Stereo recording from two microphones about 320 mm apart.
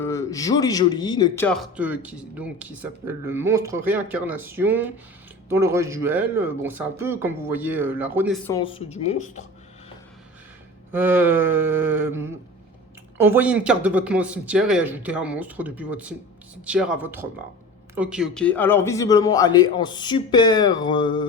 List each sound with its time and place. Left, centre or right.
0.0 s a man's voice: centre
8.4 s speech: centre
10.9 s a man's voice: centre